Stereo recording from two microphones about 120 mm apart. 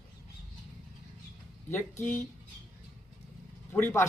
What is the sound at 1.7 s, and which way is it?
Speech, 20° left (ahead or behind).